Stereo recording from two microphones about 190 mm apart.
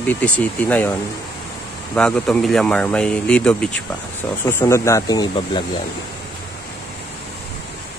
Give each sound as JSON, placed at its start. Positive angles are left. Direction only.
{"t": 0.0, "sound": "speech", "side_deg": 10}
{"t": 2.0, "sound": "a man's voice", "side_deg": 5}